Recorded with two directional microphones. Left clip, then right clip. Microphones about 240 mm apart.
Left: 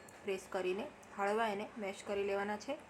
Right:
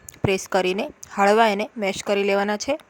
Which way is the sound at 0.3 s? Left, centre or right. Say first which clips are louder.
Right 17 dB; right.